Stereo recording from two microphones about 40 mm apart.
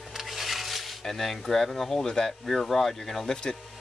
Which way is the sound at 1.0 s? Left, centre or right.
Centre.